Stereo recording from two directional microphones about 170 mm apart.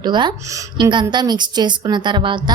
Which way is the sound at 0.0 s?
25° right (ahead or behind).